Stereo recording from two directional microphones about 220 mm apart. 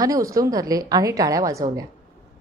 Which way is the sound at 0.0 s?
15° right (ahead or behind).